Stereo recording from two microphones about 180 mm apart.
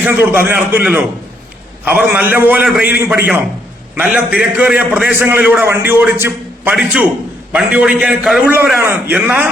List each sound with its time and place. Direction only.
0.0 s a man's voice: 10° right (ahead or behind)